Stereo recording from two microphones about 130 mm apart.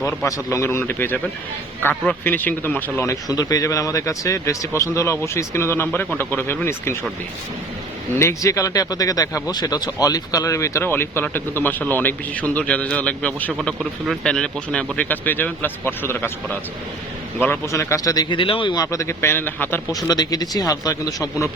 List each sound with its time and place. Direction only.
0.0 s speech: 20° left (ahead or behind)
8.2 s speech: 25° left (ahead or behind)
19.9 s speech: 30° left (ahead or behind)